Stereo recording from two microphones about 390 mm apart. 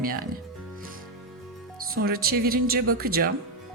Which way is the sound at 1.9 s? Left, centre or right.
Right.